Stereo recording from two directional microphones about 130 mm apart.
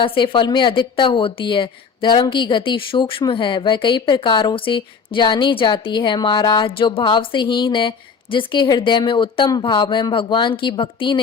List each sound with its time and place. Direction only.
0.0 s a woman's voice: 40° left (ahead or behind)